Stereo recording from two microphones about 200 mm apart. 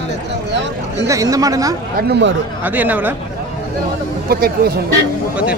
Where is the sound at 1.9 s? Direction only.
55° right (ahead or behind).